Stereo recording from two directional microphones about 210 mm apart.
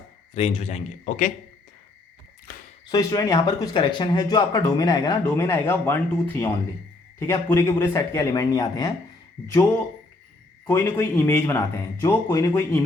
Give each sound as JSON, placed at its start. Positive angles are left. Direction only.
{"t": 0.3, "sound": "a man's voice", "side_deg": 30}
{"t": 2.8, "sound": "speech", "side_deg": 15}
{"t": 10.7, "sound": "speech", "side_deg": 15}